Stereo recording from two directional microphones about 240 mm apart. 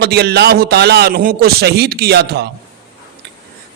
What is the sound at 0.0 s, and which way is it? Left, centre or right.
A man's voice, right.